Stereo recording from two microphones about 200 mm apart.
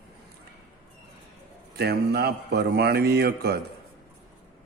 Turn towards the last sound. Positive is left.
turn(degrees=-55)  # may be behind; listen again after turning